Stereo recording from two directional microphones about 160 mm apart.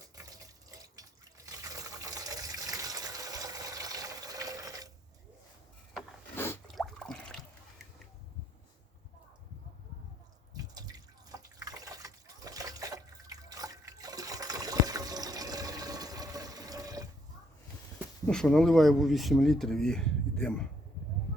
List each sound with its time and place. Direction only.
1.5 s water: 20° right (ahead or behind)
6.3 s squish: 15° left (ahead or behind)
6.7 s a sound: centre (ahead or behind)
10.5 s drip: 25° right (ahead or behind)
12.0 s water: 20° right (ahead or behind)
18.3 s speech: 5° left (ahead or behind)